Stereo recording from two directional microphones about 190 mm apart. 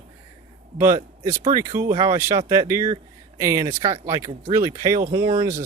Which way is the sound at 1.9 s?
30° right (ahead or behind).